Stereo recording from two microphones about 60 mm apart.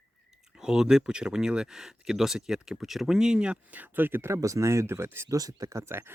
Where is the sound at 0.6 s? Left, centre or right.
Centre; by 4.3 s right.